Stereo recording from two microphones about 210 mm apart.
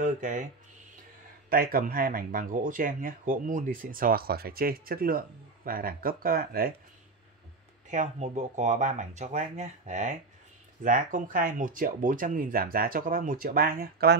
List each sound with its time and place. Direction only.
0.0 s speech: 40° right (ahead or behind)
1.5 s speech: 45° right (ahead or behind)
7.9 s speech: 35° right (ahead or behind)